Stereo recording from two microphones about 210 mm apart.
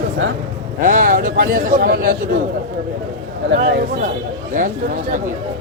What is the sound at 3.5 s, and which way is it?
A man's voice, 50° right (ahead or behind).